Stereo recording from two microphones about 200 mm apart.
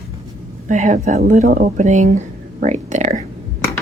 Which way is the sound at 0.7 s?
40° right (ahead or behind).